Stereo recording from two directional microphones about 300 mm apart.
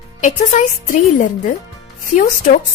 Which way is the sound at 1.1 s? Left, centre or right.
Left.